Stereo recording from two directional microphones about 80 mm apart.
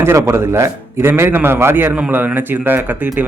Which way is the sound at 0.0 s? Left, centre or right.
Right.